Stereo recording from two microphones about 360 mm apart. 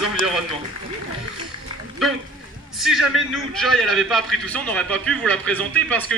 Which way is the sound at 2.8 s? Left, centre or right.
Centre.